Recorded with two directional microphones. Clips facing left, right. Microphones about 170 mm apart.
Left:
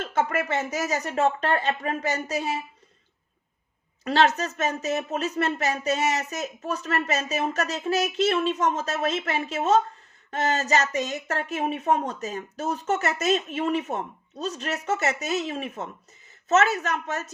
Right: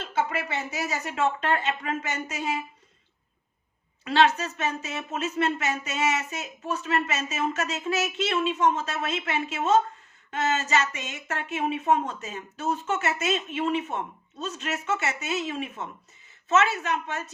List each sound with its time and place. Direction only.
0.1 s speech: 50° left (ahead or behind)
4.0 s speech: 40° left (ahead or behind)